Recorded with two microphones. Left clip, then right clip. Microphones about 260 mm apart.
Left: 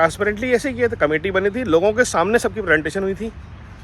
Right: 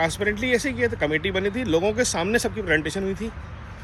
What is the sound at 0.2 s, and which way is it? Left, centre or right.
Speech, centre.